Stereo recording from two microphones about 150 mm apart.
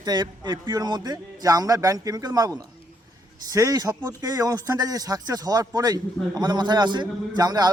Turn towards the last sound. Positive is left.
turn(degrees=-25)  # may be behind; listen again after turning